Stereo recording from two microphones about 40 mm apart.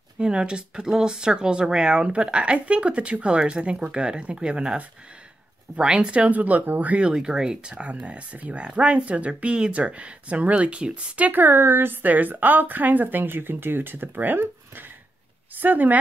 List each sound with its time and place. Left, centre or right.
0.2 s speech: right
5.8 s speech: right
6.1 s speech: right
7.0 s speech: right
7.7 s speech: right
11.4 s a woman's voice: right
12.0 s speech: right